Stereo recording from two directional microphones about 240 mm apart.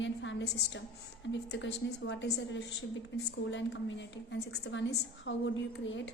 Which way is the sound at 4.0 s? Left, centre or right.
Left.